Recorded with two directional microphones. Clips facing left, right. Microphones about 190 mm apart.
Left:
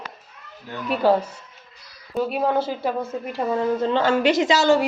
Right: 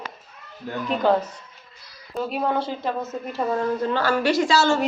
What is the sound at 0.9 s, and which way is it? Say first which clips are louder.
A woman's voice: left 2 dB; 5° left (ahead or behind).